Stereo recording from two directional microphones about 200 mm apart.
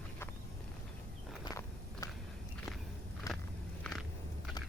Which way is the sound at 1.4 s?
20° left (ahead or behind).